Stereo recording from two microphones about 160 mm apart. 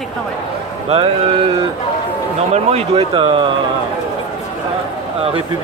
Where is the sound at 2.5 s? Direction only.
40° right (ahead or behind).